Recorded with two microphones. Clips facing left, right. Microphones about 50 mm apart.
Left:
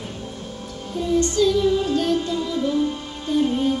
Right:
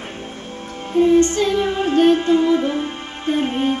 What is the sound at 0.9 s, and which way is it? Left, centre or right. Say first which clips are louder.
Music: right 6 dB; right.